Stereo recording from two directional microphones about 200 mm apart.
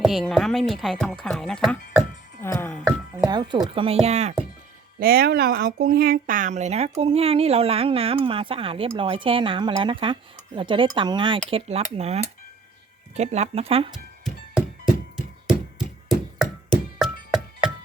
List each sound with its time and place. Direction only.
0.0 s speech: centre (ahead or behind)
3.2 s speech: 20° right (ahead or behind)
3.8 s cutlery: 30° right (ahead or behind)
4.9 s speech: 50° right (ahead or behind); by 11.3 s 25° right (ahead or behind)
11.4 s cutlery: 30° right (ahead or behind)
13.9 s music: centre (ahead or behind)
15.1 s a sound: centre (ahead or behind)
17.0 s music: centre (ahead or behind)